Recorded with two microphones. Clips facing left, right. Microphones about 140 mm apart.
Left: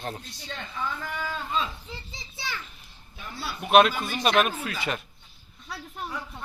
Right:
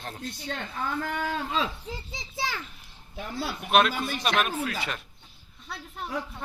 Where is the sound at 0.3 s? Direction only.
55° right (ahead or behind); by 1.7 s 85° right.